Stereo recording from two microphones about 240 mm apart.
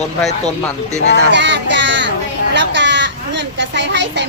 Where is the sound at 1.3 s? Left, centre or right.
Right.